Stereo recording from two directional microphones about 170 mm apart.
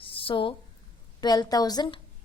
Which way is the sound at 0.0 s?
30° left (ahead or behind).